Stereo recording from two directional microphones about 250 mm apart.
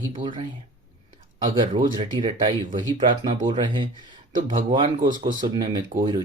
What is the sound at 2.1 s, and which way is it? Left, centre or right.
Speech, centre.